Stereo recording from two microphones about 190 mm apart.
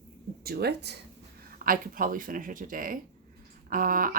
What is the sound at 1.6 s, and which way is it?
Speech, 45° right (ahead or behind).